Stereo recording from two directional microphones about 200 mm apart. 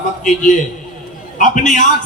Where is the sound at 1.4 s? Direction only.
40° left (ahead or behind).